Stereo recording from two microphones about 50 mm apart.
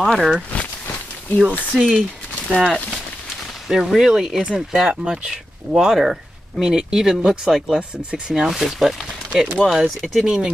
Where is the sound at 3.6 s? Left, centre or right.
Centre.